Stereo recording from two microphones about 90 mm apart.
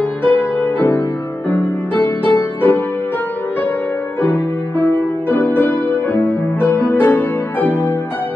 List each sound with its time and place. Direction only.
0.2 s music: 25° left (ahead or behind)
4.2 s music: 20° left (ahead or behind)